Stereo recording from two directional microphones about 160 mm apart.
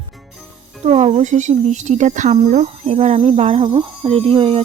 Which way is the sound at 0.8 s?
45° right (ahead or behind).